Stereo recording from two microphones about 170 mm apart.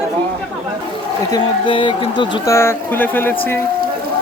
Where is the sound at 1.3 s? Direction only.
25° left (ahead or behind).